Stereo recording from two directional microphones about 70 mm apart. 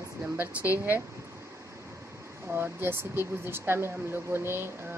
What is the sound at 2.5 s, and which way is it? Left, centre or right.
Speech, right.